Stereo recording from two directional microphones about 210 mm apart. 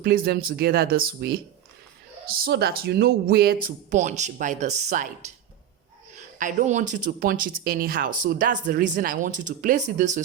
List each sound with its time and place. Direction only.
0.0 s speech: 45° right (ahead or behind)
3.9 s speech: 35° right (ahead or behind)